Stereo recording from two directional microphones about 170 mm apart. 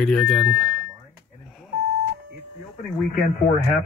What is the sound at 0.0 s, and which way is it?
Speech, 5° left (ahead or behind).